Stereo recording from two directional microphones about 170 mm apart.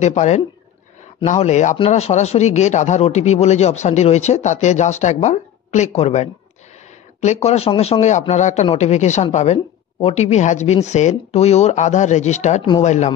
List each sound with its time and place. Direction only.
0.0 s a man's voice: 40° left (ahead or behind)
7.4 s a man's voice: 35° left (ahead or behind)